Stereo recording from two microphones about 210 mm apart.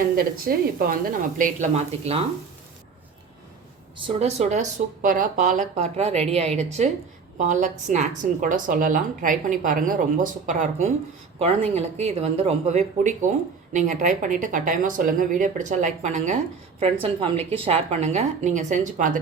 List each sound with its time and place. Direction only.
0.2 s a woman's voice: 45° right (ahead or behind)
3.9 s a woman's voice: 25° right (ahead or behind)